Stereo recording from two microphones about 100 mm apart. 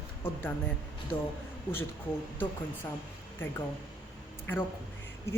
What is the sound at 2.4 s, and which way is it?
Speech, 20° left (ahead or behind).